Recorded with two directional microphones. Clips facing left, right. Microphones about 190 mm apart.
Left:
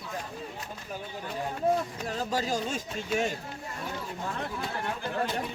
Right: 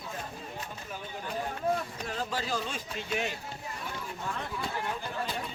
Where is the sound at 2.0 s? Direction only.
40° left (ahead or behind).